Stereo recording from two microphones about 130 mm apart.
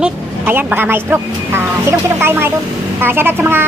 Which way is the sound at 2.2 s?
20° right (ahead or behind).